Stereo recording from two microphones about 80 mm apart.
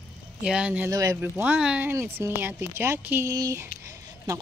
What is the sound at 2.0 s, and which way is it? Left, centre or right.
Speech, right.